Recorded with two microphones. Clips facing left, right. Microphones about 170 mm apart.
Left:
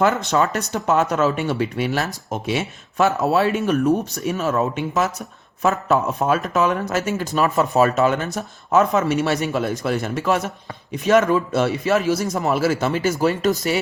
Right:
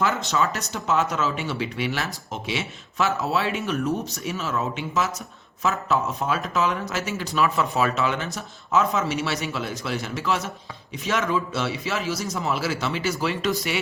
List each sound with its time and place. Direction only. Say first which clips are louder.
0.0 s speech: left 5 dB; 55° left (ahead or behind)